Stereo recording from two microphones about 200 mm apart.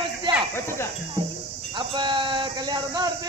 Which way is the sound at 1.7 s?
25° right (ahead or behind).